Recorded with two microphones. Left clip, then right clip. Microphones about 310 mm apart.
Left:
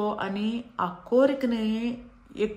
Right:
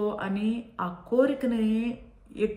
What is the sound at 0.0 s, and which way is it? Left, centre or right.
A woman's voice, left.